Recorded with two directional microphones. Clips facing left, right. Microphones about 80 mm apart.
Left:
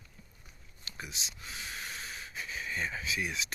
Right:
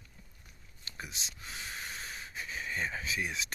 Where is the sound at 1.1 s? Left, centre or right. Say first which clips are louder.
Left 1 dB; right.